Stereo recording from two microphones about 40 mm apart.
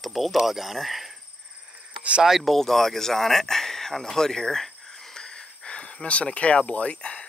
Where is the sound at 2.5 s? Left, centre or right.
Centre.